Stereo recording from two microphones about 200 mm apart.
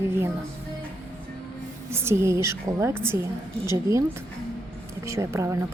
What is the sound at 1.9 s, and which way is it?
A woman's voice, 10° right (ahead or behind).